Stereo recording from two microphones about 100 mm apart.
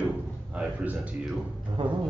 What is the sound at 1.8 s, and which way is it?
Speech, 55° right (ahead or behind).